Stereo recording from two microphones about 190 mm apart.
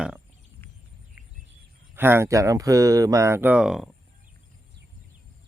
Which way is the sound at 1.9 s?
10° right (ahead or behind).